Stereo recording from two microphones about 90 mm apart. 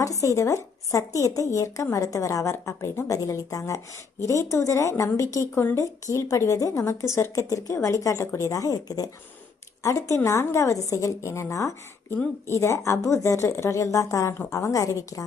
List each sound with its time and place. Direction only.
0.0 s speech: 35° left (ahead or behind)